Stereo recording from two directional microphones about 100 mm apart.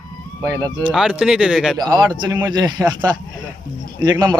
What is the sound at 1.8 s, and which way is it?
A man's voice, 45° right (ahead or behind).